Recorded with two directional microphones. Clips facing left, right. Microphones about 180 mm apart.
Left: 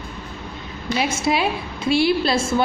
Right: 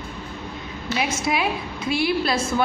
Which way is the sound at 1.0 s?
30° left (ahead or behind).